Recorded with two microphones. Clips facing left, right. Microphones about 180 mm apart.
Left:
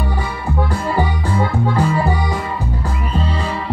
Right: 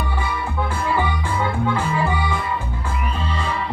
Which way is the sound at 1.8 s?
40° left (ahead or behind).